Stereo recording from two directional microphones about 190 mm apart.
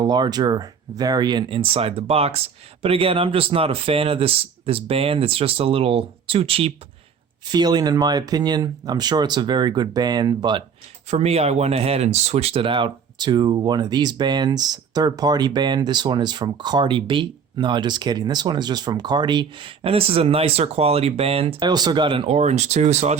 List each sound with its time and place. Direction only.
0.0 s speech: 20° right (ahead or behind)
11.1 s speech: 35° right (ahead or behind)